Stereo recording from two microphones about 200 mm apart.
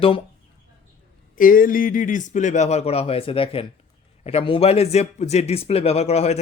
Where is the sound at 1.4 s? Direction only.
45° left (ahead or behind).